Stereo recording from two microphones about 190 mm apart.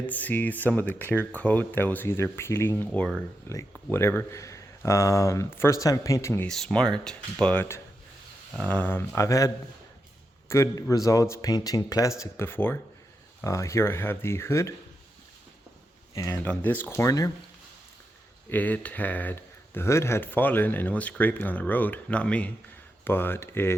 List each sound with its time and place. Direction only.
0.0 s speech: 10° left (ahead or behind)
6.5 s speech: 5° left (ahead or behind)
10.5 s speech: 15° left (ahead or behind)
16.1 s speech: 15° left (ahead or behind)
18.5 s speech: 10° left (ahead or behind)